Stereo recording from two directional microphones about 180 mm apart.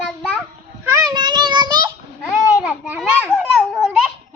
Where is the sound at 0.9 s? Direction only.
20° right (ahead or behind).